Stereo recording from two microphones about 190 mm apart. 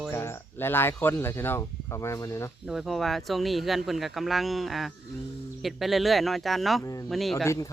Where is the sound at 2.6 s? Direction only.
Centre (ahead or behind).